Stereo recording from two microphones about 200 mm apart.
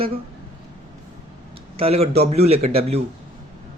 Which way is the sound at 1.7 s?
30° right (ahead or behind).